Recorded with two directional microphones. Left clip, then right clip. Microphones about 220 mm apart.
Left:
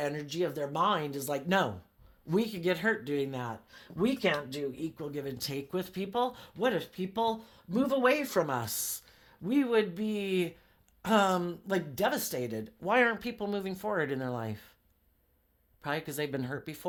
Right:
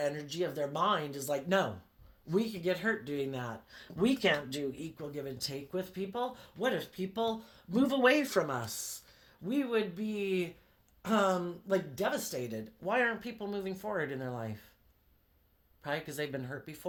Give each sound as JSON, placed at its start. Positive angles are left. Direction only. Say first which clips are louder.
{"t": 0.0, "sound": "speech", "louder": "left 1 dB", "side_deg": 35}
{"t": 15.8, "sound": "speech", "louder": "left 2 dB", "side_deg": 35}